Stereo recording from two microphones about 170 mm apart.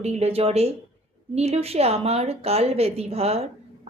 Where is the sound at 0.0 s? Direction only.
35° right (ahead or behind).